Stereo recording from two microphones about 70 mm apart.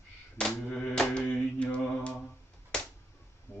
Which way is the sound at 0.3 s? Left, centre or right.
Centre.